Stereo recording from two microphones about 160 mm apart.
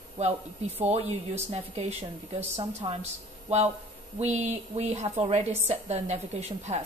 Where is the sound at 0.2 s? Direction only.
40° right (ahead or behind).